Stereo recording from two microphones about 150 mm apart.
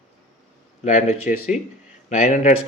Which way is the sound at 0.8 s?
50° left (ahead or behind).